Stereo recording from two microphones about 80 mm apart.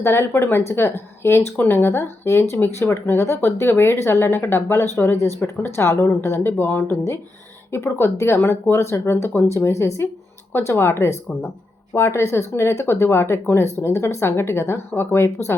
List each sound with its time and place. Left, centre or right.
0.0 s speech: left